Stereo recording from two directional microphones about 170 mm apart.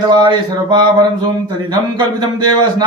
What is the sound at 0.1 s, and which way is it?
A man's voice, 25° right (ahead or behind).